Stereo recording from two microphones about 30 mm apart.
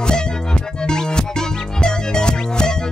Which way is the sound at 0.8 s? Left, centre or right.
Left.